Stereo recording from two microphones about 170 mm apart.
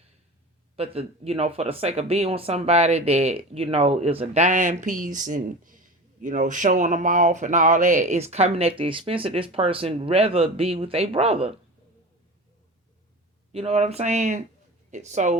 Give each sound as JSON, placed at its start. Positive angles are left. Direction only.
{"t": 0.8, "sound": "speech", "side_deg": -35}
{"t": 13.5, "sound": "speech", "side_deg": -35}